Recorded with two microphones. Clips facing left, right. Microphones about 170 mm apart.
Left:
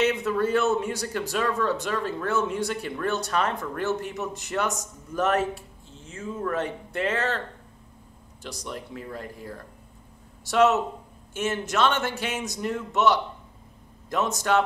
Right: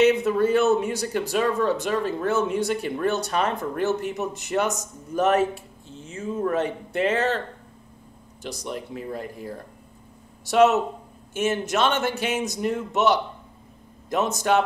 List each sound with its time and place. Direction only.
0.0 s speech: 20° right (ahead or behind)